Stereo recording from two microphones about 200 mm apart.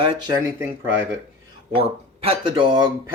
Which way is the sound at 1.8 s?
30° right (ahead or behind).